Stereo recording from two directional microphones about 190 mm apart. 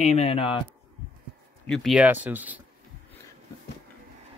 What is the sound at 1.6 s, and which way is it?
Speech, centre (ahead or behind).